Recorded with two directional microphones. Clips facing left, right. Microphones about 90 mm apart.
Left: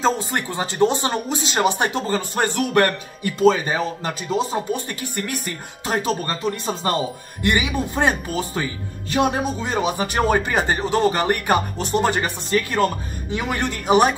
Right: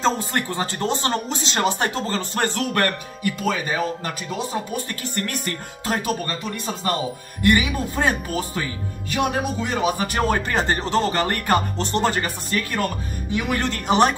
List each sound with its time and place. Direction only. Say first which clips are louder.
0.0 s speech: left 1 dB; 10° left (ahead or behind); by 4.6 s 25° left (ahead or behind)
5.1 s speech: right 1 dB; 5° left (ahead or behind)
5.9 s speech: left 2 dB; 30° left (ahead or behind)
13.7 s speech: left 2 dB; 5° left (ahead or behind)